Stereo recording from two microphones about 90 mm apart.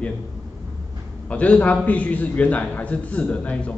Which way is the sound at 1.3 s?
15° left (ahead or behind).